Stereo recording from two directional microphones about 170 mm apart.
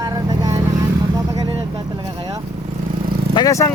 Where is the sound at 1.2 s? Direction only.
20° right (ahead or behind).